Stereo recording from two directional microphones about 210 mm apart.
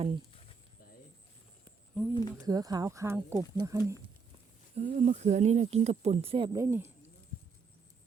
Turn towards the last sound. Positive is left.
turn(degrees=-10)  # may be behind; listen again after turning